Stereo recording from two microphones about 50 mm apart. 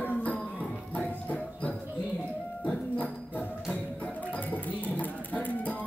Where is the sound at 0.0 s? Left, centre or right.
Left.